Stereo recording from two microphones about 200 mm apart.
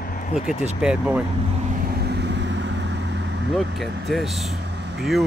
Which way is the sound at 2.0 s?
60° right (ahead or behind).